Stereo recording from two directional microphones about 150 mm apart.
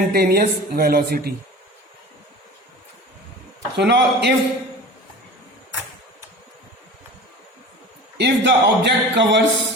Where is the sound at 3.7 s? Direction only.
90° right.